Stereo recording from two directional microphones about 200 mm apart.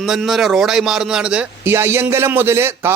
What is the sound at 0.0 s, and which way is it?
A man's voice, centre (ahead or behind).